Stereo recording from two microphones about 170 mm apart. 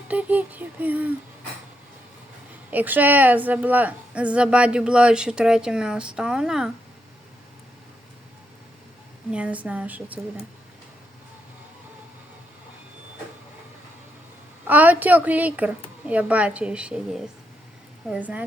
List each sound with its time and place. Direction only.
0.1 s a woman's voice: 10° right (ahead or behind)
2.6 s a woman's voice: 10° right (ahead or behind)
9.3 s a woman's voice: 10° right (ahead or behind)
14.7 s a woman's voice: 10° right (ahead or behind)